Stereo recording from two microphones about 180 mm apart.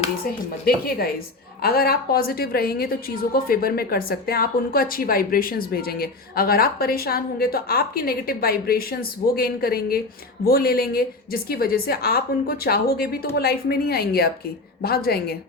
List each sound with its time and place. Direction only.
0.6 s a woman's voice: 60° left (ahead or behind)